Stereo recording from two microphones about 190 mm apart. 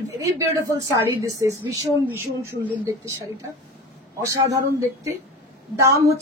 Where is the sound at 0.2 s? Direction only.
15° right (ahead or behind).